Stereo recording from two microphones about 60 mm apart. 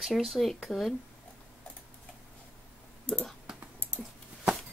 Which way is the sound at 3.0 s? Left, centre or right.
Left.